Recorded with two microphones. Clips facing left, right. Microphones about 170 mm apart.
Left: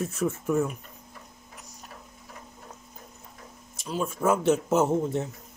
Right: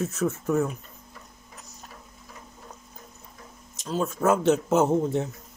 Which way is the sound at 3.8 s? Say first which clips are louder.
Right 2 dB; 10° left (ahead or behind).